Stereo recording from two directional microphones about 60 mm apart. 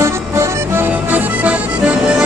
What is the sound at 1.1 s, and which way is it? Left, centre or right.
Music, right.